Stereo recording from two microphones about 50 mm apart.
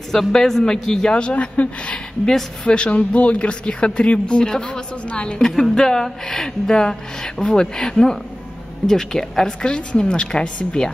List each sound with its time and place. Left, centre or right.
0.3 s speech: centre
1.1 s speech: left
2.2 s speech: centre
5.5 s speech: centre